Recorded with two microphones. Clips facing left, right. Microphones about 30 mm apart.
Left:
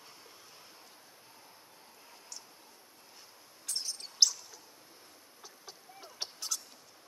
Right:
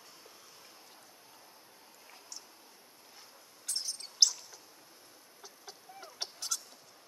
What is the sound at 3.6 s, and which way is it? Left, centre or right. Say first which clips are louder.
Bird: even; centre.